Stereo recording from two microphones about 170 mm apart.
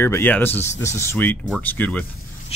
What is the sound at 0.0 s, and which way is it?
Speech, 15° left (ahead or behind).